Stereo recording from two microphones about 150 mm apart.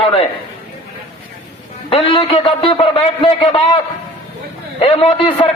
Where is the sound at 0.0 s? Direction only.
40° left (ahead or behind).